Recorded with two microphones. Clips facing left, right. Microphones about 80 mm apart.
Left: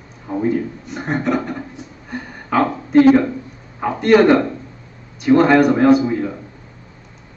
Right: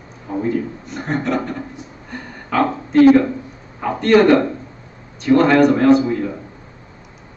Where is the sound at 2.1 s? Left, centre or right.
Centre.